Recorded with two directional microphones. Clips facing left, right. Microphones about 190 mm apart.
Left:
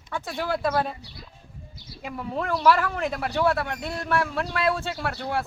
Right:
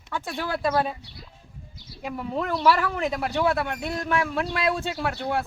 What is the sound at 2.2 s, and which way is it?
Speech, centre (ahead or behind).